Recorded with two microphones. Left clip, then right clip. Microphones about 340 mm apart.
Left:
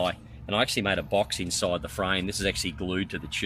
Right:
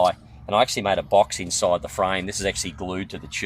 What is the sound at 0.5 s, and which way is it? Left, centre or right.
Speech, centre.